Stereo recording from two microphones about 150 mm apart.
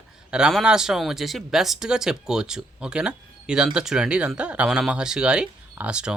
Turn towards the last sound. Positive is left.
turn(degrees=-5)  # may be behind; listen again after turning